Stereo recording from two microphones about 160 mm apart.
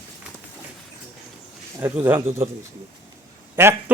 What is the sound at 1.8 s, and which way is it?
Speech, 15° right (ahead or behind).